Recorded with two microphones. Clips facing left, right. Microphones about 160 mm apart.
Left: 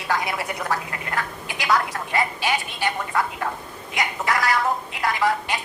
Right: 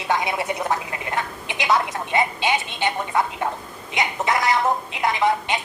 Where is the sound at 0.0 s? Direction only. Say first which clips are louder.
Right 2 dB; 20° right (ahead or behind).